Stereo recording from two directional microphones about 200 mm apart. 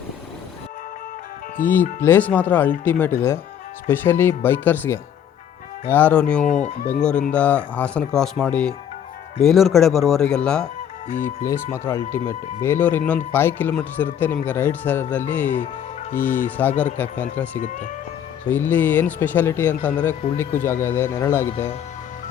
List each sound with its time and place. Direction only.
2.0 s speech: 10° left (ahead or behind)
6.5 s speech: 35° left (ahead or behind)
7.3 s speech: 5° left (ahead or behind)